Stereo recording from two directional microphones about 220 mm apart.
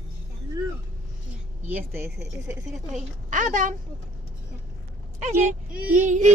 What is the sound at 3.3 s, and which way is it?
Speech, 35° right (ahead or behind).